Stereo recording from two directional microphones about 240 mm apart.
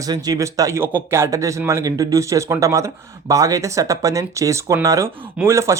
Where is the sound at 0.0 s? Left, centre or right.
Centre.